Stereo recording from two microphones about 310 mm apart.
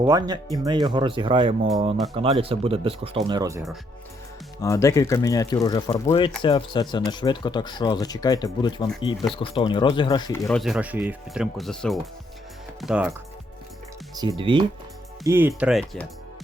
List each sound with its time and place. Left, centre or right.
0.0 s speech: centre
4.6 s speech: centre
10.6 s speech: centre
14.2 s speech: centre